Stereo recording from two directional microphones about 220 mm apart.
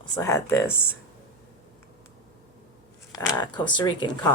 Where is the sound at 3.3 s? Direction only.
20° left (ahead or behind).